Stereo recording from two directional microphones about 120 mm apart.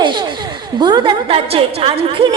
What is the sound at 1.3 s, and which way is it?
Speech, 50° right (ahead or behind).